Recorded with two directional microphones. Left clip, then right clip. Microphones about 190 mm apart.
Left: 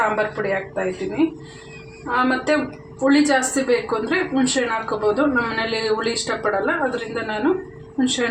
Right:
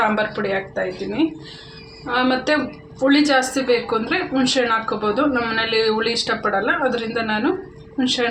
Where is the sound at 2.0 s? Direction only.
35° right (ahead or behind).